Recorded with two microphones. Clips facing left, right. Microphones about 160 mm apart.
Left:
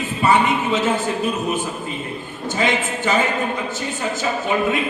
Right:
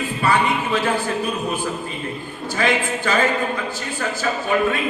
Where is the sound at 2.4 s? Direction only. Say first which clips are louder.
Even; 20° left (ahead or behind).